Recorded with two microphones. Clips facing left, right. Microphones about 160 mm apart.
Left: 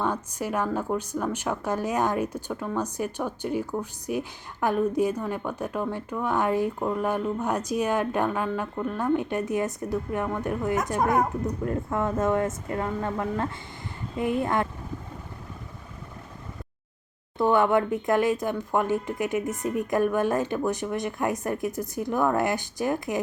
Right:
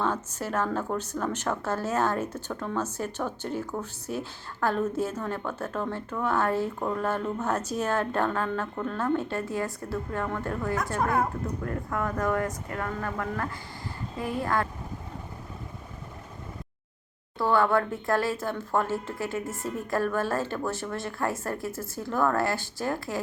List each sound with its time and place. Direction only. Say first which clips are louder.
0.0 s speech: left 1 dB; 15° left (ahead or behind)
17.3 s speech: left 2 dB; 20° left (ahead or behind)